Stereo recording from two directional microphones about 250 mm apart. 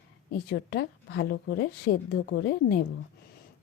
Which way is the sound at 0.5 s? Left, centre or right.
Left.